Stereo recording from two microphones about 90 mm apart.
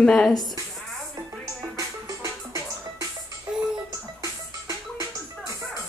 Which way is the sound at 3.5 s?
10° right (ahead or behind).